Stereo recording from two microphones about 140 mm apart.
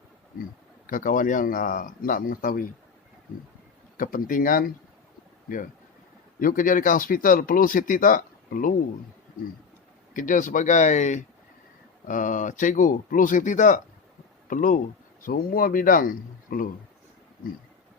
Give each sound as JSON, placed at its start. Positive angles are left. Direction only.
{"t": 0.9, "sound": "speech", "side_deg": 75}
{"t": 3.9, "sound": "speech", "side_deg": 75}
{"t": 6.4, "sound": "speech", "side_deg": 80}
{"t": 10.2, "sound": "speech", "side_deg": 65}
{"t": 15.2, "sound": "speech", "side_deg": 90}